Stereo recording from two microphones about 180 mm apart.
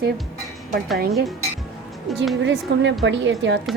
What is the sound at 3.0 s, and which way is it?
Speech, 90° right.